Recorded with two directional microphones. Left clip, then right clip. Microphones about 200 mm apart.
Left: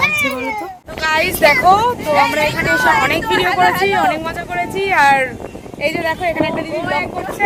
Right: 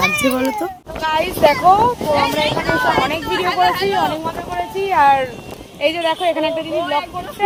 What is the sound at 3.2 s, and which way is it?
Speech, 55° left (ahead or behind).